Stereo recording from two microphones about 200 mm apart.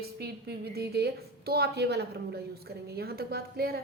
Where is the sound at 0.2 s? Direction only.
50° right (ahead or behind).